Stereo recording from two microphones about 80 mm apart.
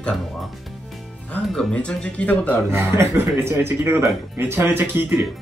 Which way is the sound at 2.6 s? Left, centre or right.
Right.